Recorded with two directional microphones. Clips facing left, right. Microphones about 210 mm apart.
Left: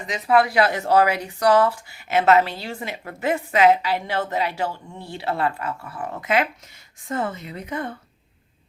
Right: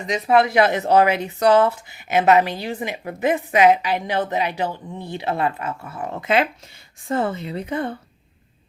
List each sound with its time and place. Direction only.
0.1 s speech: 25° right (ahead or behind)